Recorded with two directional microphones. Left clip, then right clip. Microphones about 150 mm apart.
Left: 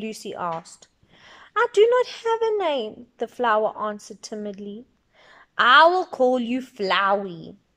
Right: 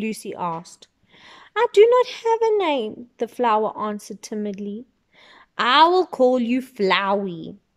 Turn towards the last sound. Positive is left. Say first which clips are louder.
# right 1 dB
turn(degrees=-25)  # may be behind; listen again after turning